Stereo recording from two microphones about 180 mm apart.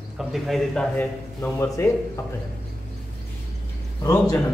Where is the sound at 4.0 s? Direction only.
20° left (ahead or behind).